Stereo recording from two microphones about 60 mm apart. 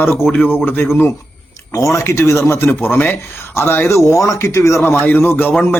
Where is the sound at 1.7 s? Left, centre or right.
Left.